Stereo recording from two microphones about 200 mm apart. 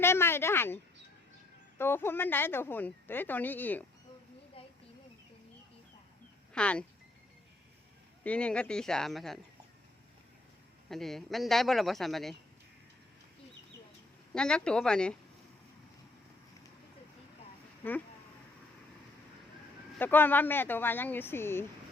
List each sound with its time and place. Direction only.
0.0 s speech: 10° left (ahead or behind)
1.8 s speech: 10° left (ahead or behind)
4.6 s a sound: 30° left (ahead or behind)
6.5 s speech: 5° left (ahead or behind)
8.2 s speech: 5° left (ahead or behind)
10.8 s speech: centre (ahead or behind)
14.3 s speech: 5° left (ahead or behind)
20.0 s speech: 10° left (ahead or behind)